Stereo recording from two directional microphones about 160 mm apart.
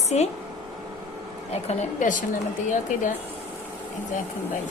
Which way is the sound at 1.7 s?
50° left (ahead or behind).